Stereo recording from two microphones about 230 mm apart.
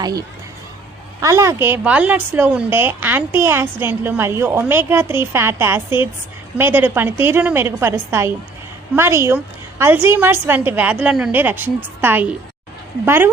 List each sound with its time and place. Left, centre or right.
0.0 s a woman's voice: centre